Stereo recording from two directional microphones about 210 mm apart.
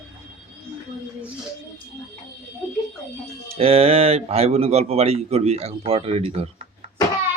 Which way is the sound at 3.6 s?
30° right (ahead or behind).